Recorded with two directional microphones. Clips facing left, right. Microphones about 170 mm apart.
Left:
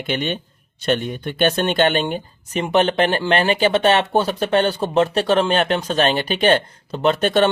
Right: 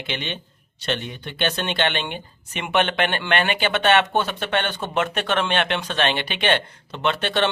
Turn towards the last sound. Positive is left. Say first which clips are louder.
# left 6 dB
turn(degrees=45)  # may be behind; listen again after turning